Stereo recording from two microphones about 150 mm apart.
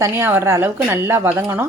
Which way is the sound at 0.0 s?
15° right (ahead or behind).